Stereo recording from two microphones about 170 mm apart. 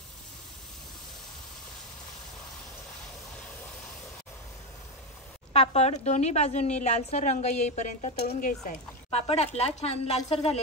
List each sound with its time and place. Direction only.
5.5 s a woman's voice: 40° left (ahead or behind)